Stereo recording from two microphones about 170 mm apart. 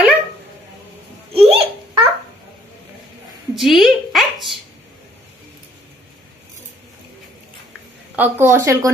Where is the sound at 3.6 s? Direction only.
Centre (ahead or behind).